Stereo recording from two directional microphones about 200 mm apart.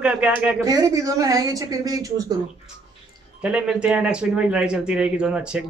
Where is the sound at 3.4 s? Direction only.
5° right (ahead or behind).